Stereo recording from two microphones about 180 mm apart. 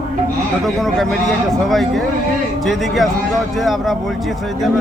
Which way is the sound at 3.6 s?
Centre (ahead or behind).